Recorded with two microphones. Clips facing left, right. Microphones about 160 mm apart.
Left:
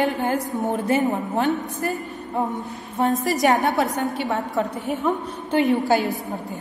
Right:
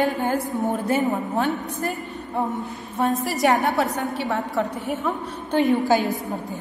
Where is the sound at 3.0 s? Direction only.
20° left (ahead or behind).